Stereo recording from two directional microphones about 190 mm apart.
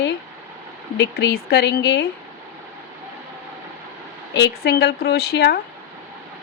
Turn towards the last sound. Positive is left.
turn(degrees=55)  # may be behind; listen again after turning